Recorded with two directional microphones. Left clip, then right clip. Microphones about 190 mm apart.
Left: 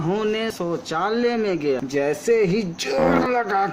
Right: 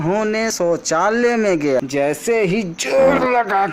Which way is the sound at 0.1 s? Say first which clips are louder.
Right 4 dB; 40° right (ahead or behind).